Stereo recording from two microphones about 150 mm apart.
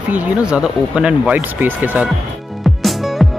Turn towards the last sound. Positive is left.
turn(degrees=0)  # may be behind; listen again after turning